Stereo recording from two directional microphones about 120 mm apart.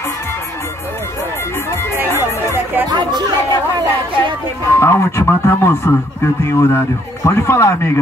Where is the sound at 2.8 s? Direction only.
35° right (ahead or behind).